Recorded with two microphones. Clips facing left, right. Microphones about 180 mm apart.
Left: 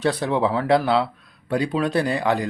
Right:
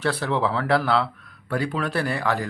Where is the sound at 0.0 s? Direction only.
15° left (ahead or behind).